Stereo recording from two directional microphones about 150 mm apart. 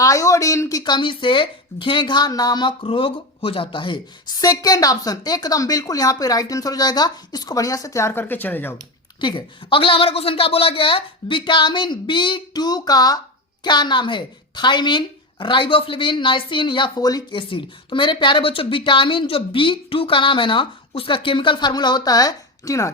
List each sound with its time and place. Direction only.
0.0 s speech: 20° left (ahead or behind)
9.2 s speech: 35° left (ahead or behind)